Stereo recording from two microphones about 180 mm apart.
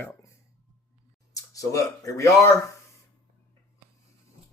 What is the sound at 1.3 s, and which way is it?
Speech, 20° left (ahead or behind).